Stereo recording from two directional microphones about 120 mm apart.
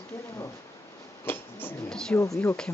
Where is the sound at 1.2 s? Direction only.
20° left (ahead or behind).